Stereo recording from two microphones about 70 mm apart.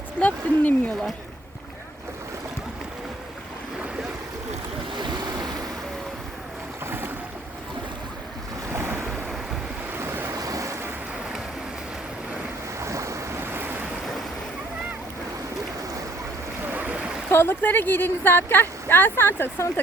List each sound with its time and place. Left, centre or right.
0.2 s speech: centre
4.9 s waves: right
6.8 s boat: right
8.7 s waves: right
10.0 s waves: right
10.4 s waves: right
12.8 s waves: right
16.6 s stream: right
17.3 s a woman's voice: left